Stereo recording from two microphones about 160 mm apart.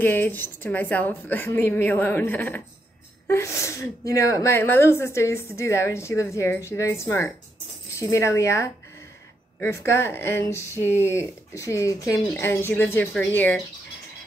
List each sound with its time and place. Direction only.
0.0 s speech: 10° left (ahead or behind)